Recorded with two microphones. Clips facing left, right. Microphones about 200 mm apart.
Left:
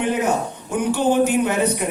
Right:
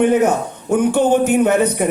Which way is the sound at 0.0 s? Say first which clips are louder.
Right 6 dB; 50° right (ahead or behind).